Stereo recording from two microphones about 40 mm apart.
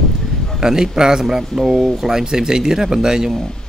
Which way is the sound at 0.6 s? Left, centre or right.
Centre.